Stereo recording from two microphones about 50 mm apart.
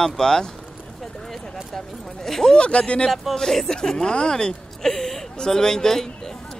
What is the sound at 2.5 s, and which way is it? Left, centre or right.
Speech, left.